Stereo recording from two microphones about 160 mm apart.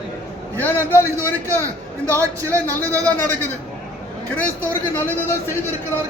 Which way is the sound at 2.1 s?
20° right (ahead or behind).